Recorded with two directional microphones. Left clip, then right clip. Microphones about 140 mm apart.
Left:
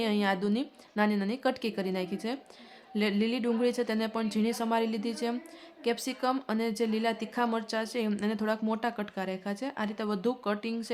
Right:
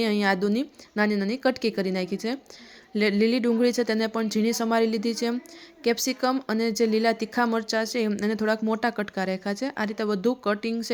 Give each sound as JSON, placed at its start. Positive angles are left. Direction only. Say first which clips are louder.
{"t": 0.0, "sound": "a woman's voice", "louder": "right 5 dB", "side_deg": -30}